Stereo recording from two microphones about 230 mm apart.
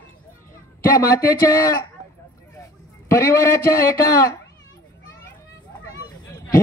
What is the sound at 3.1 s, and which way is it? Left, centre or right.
Speech, centre.